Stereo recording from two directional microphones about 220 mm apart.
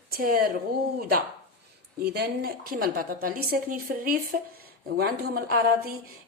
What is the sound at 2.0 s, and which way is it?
A woman's voice, 45° right (ahead or behind).